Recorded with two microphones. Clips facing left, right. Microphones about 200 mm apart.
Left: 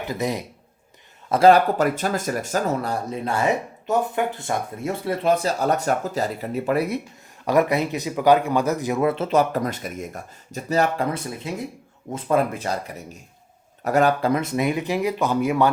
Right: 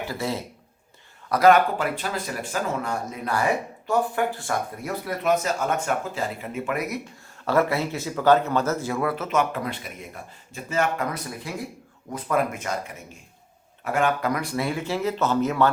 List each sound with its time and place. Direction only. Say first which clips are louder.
0.0 s speech: left 3 dB; 20° left (ahead or behind)
1.3 s speech: left 2 dB; 30° left (ahead or behind)
7.4 s speech: left 3 dB; 15° left (ahead or behind)